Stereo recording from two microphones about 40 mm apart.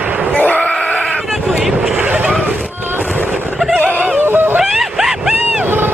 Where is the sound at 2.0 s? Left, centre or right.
Right.